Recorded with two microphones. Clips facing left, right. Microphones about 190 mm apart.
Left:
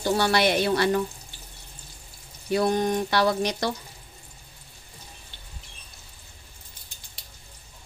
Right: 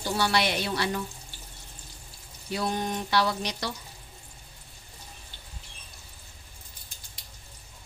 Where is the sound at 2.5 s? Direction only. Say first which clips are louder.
Left 7 dB; 50° left (ahead or behind).